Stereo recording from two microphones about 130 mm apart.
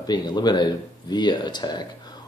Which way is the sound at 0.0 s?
30° left (ahead or behind).